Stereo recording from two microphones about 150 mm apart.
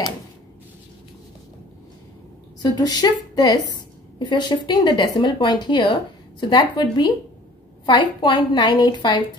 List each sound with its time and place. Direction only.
2.6 s a woman's voice: 25° left (ahead or behind)